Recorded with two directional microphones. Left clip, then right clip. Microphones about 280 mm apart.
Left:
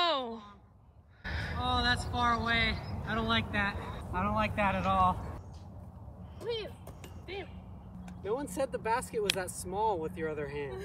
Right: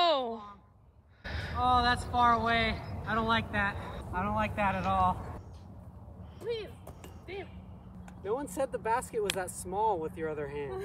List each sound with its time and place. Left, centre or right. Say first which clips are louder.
0.0 s a sound: right 3 dB; centre
1.6 s speech: right 4 dB; right
3.2 s speech: right 2 dB; centre
6.4 s speech: even; centre